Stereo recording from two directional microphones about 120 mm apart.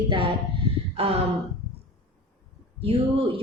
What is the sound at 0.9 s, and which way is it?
Speech, 55° right (ahead or behind).